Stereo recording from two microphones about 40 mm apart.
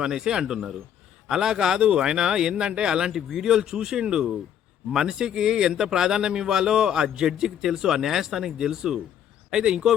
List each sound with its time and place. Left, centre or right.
0.0 s speech: centre